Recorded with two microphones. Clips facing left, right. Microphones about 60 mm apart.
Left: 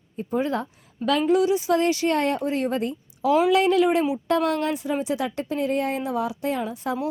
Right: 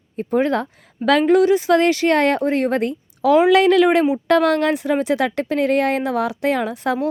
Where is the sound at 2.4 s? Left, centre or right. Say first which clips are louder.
Right 6 dB; right.